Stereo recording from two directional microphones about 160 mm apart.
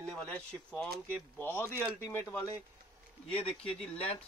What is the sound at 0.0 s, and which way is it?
Speech, 10° left (ahead or behind).